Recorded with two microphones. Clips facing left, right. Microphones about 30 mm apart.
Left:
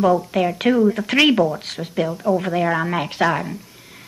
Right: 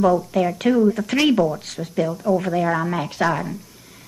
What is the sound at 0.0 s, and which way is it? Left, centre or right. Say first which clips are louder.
A woman's voice: left 1 dB; left.